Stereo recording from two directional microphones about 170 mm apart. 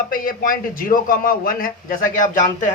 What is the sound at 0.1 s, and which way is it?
A man's voice, 55° left (ahead or behind).